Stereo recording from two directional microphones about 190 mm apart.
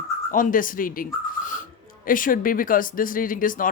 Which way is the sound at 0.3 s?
45° left (ahead or behind).